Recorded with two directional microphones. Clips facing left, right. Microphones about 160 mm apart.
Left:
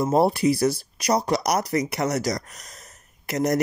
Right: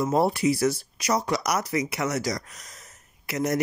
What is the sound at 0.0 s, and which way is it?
Speech, 35° left (ahead or behind).